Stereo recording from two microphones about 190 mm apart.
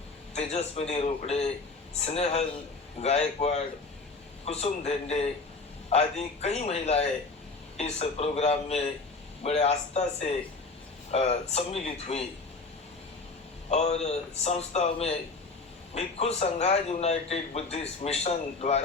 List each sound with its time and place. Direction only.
0.3 s a man's voice: 35° left (ahead or behind)
13.7 s a man's voice: 35° left (ahead or behind)